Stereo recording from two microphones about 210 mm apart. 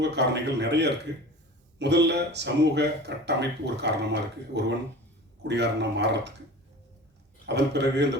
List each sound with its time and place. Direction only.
0.0 s speech: 55° right (ahead or behind)
7.4 s speech: 55° right (ahead or behind)